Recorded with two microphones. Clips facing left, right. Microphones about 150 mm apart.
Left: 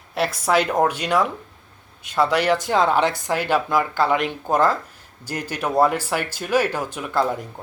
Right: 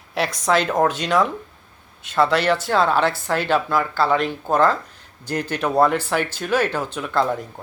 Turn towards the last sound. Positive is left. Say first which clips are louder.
# right 1 dB
turn(degrees=10)  # may be behind; listen again after turning